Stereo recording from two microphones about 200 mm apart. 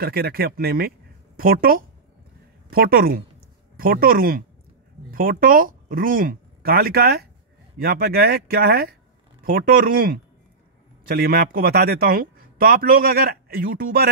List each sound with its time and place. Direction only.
0.0 s speech: 50° right (ahead or behind)